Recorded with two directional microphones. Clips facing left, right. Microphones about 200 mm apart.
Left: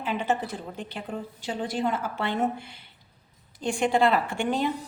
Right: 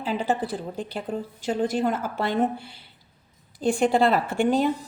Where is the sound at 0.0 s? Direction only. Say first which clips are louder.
Right 2 dB; 35° right (ahead or behind).